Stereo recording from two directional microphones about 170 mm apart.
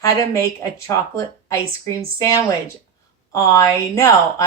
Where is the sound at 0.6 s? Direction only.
15° left (ahead or behind).